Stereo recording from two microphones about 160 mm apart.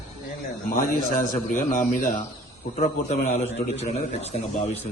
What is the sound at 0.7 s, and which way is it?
A man's voice, 55° left (ahead or behind).